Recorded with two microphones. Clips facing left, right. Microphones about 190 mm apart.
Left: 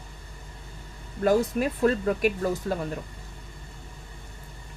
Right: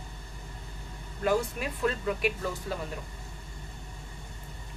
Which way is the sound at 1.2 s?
45° left (ahead or behind).